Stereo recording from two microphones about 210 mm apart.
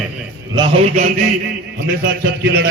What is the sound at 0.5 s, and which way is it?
Speech, 25° right (ahead or behind).